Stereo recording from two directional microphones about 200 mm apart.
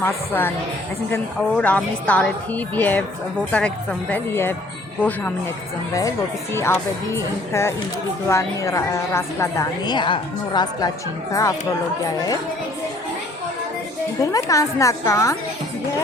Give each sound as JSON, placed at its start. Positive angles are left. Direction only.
{"t": 0.0, "sound": "a woman's voice", "side_deg": 10}
{"t": 4.1, "sound": "a woman's voice", "side_deg": 10}
{"t": 5.9, "sound": "a woman's voice", "side_deg": 15}
{"t": 14.2, "sound": "a woman's voice", "side_deg": 15}